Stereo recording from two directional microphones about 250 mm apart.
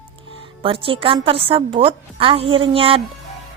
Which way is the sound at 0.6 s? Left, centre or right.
Right.